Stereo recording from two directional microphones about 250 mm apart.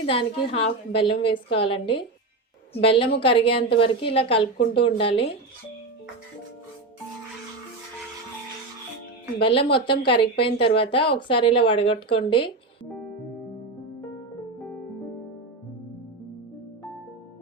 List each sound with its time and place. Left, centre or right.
0.0 s speech: left
9.4 s speech: centre